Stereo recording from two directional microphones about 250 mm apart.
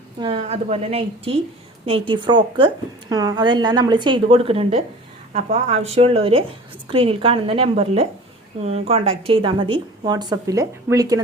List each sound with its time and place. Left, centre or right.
0.2 s a woman's voice: right